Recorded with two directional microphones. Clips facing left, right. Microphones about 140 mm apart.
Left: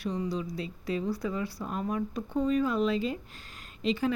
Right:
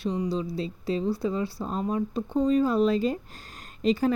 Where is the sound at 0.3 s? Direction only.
30° right (ahead or behind).